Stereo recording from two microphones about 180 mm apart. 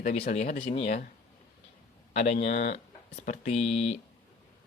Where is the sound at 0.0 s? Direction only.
40° left (ahead or behind).